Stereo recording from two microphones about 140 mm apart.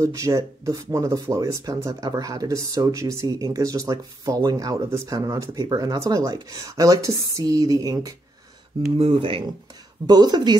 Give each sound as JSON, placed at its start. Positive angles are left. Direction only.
{"t": 0.0, "sound": "speech", "side_deg": -20}
{"t": 8.9, "sound": "speech", "side_deg": -40}
{"t": 10.0, "sound": "speech", "side_deg": -30}